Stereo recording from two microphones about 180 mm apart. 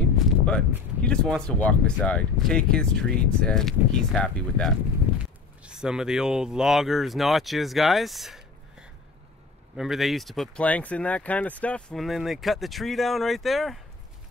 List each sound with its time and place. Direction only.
0.5 s speech: 5° left (ahead or behind)